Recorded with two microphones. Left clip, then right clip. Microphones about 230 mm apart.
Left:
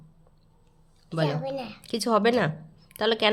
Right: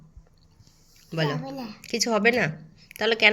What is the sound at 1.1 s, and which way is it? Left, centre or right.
A woman's voice, centre.